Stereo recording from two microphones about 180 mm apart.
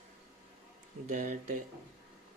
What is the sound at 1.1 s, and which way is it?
Speech, 45° right (ahead or behind).